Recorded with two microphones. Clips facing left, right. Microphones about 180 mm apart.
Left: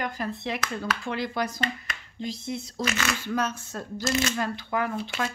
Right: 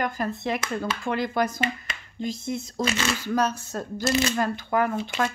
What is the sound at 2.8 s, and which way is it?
Speech, 30° right (ahead or behind).